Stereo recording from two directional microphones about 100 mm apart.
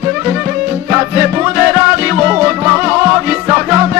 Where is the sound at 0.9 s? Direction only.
25° right (ahead or behind).